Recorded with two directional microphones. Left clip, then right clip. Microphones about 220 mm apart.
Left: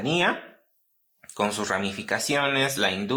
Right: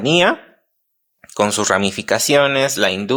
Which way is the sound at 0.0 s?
45° right (ahead or behind).